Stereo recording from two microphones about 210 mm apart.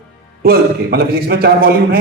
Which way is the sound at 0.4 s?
45° right (ahead or behind).